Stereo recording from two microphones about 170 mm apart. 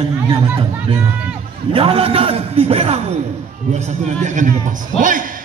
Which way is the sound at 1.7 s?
35° right (ahead or behind).